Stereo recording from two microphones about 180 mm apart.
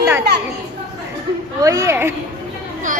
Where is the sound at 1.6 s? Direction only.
20° right (ahead or behind).